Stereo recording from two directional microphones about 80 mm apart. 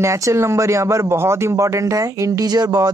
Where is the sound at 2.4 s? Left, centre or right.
Right.